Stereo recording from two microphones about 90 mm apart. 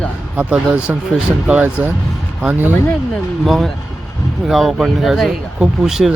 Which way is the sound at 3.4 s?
Centre (ahead or behind).